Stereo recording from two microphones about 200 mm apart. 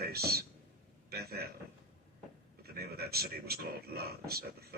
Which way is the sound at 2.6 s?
50° right (ahead or behind).